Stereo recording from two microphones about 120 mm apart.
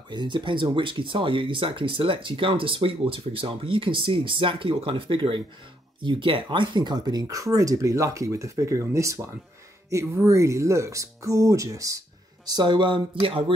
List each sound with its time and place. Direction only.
0.1 s speech: 40° right (ahead or behind)
12.4 s speech: 40° right (ahead or behind)